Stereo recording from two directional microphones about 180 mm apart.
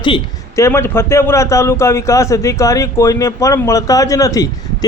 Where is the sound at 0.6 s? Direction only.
15° left (ahead or behind).